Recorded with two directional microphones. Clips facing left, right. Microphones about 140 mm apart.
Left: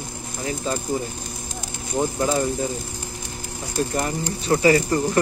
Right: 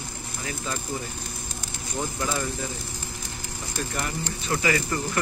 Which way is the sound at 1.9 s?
30° left (ahead or behind).